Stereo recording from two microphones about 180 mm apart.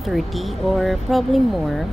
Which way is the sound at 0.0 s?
Centre (ahead or behind).